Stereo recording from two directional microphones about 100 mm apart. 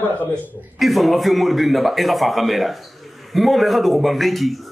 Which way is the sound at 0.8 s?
Centre (ahead or behind).